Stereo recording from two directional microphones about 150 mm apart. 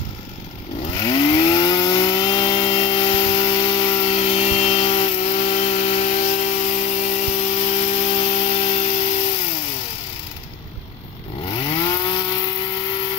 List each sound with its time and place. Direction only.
0.9 s chainsaw: 30° left (ahead or behind)
4.0 s sawing: 45° left (ahead or behind)
11.4 s chainsaw: 35° left (ahead or behind)